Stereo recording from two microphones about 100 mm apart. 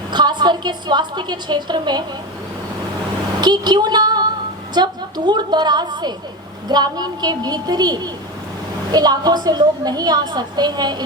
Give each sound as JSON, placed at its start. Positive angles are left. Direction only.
{"t": 0.1, "sound": "a woman's voice", "side_deg": -45}
{"t": 3.4, "sound": "a woman's voice", "side_deg": -45}